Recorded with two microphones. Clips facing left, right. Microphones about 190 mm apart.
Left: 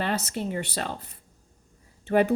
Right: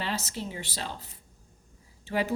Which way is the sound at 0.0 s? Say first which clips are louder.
Left 5 dB; 55° left (ahead or behind).